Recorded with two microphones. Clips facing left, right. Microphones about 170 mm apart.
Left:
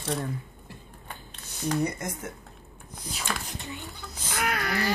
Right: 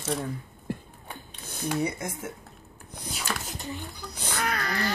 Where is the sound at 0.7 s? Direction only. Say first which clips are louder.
Right 15 dB; 55° right (ahead or behind).